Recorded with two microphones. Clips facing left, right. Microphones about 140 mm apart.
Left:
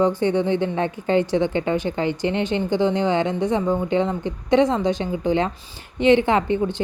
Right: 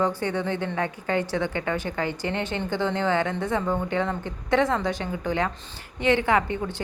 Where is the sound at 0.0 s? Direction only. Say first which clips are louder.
Left 6 dB; 20° left (ahead or behind).